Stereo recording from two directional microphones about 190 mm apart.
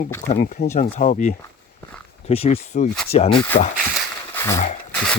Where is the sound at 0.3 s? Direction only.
35° left (ahead or behind).